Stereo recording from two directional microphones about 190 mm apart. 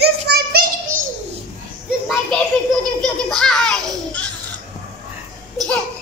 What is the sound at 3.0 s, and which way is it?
A child's voice, 5° left (ahead or behind).